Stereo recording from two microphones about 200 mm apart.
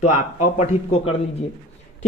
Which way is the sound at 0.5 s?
30° left (ahead or behind).